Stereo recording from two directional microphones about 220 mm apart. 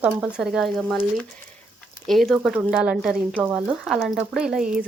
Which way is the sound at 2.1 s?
Centre (ahead or behind).